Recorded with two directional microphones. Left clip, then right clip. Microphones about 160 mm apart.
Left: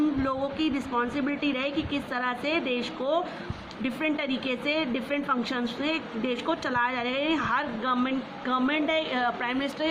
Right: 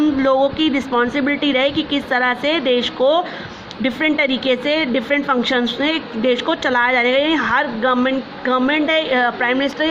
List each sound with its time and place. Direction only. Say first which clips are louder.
0.3 s a woman's voice: right 13 dB; 40° right (ahead or behind)